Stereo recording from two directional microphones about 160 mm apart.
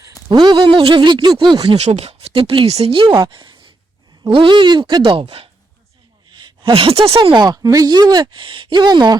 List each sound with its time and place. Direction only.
0.3 s speech: 30° right (ahead or behind)
1.7 s speech: 40° right (ahead or behind)